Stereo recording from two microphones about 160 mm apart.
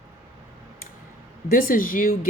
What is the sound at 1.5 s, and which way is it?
Speech, 60° left (ahead or behind).